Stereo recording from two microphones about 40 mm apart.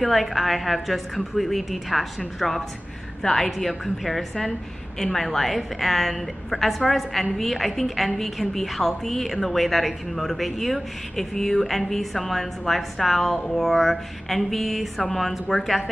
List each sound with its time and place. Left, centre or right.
0.0 s a woman's voice: centre